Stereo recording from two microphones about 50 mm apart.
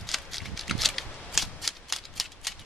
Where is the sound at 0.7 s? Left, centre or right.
Centre.